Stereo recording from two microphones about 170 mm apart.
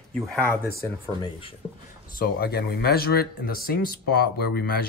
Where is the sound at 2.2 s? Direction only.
65° left (ahead or behind).